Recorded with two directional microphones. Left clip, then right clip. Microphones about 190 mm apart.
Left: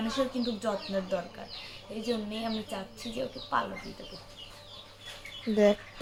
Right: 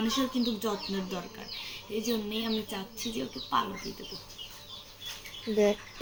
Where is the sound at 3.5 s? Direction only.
15° left (ahead or behind).